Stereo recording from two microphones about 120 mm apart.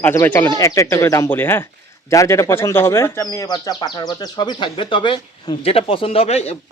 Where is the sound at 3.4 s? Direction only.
30° left (ahead or behind).